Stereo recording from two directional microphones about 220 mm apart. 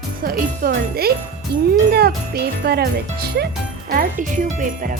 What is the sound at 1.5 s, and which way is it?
Speech, 50° right (ahead or behind).